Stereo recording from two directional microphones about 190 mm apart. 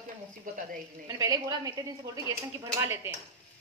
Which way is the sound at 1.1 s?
20° right (ahead or behind).